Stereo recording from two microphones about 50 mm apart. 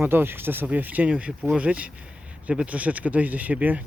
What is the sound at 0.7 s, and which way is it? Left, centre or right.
Speech, right.